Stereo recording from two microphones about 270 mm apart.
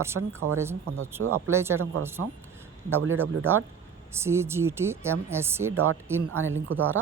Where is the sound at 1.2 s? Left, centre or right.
Right.